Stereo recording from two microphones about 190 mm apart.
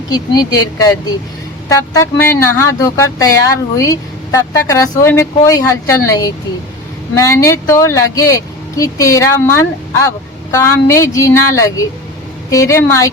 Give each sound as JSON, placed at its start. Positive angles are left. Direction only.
{"t": 0.1, "sound": "speech", "side_deg": 20}
{"t": 2.0, "sound": "speech", "side_deg": 15}